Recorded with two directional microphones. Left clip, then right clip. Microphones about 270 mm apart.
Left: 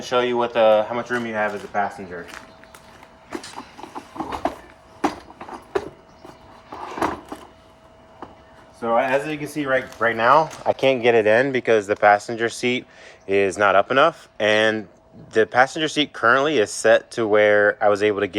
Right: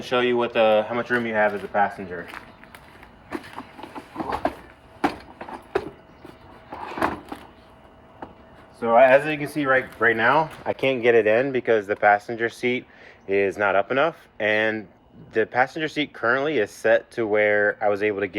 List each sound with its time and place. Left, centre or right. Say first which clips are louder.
0.0 s speech: left 1 dB; centre
5.0 s a sound: left 1 dB; centre
8.8 s speech: right 5 dB; centre
10.2 s speech: left 4 dB; centre